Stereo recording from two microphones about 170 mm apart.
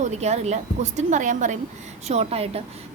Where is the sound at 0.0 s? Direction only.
40° right (ahead or behind).